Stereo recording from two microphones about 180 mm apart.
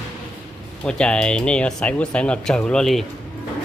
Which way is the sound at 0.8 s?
5° left (ahead or behind).